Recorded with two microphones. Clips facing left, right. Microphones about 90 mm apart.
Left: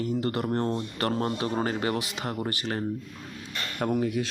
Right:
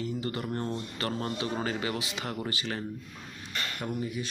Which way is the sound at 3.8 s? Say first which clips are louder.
Left 10 dB; 70° left (ahead or behind).